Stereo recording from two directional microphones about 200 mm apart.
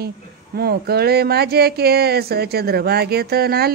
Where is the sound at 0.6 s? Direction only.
50° right (ahead or behind).